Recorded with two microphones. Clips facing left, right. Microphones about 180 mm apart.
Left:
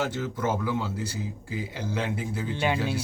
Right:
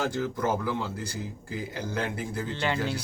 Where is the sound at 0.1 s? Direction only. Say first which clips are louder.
Right 1 dB; 5° left (ahead or behind).